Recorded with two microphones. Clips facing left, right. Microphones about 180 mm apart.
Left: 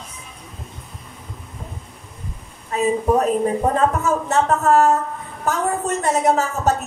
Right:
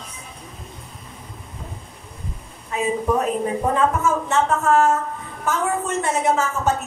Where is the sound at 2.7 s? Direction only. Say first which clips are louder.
Left 3 dB; 40° left (ahead or behind).